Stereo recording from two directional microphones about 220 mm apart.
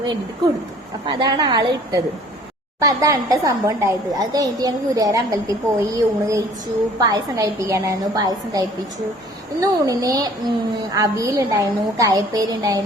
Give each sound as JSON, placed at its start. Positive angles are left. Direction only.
{"t": 1.0, "sound": "a woman's voice", "side_deg": -20}